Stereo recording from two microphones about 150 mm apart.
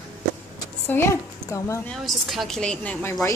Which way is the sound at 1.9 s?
Centre (ahead or behind).